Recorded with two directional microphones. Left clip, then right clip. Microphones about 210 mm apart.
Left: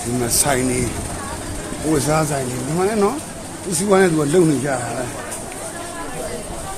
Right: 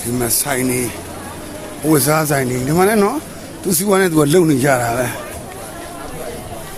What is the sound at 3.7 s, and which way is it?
Speech, 55° right (ahead or behind).